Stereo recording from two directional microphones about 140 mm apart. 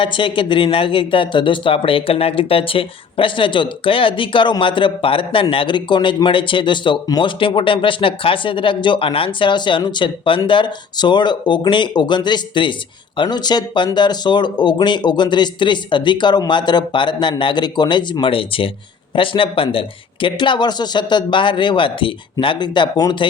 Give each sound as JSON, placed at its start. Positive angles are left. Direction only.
{"t": 0.0, "sound": "speech", "side_deg": 35}